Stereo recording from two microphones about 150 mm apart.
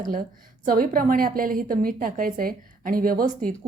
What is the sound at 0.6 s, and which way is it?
A woman's voice, 70° right (ahead or behind).